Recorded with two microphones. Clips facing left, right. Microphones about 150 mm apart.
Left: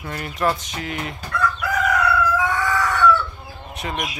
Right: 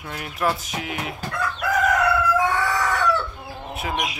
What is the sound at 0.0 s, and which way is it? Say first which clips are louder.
Speech: left 2 dB; 5° right (ahead or behind).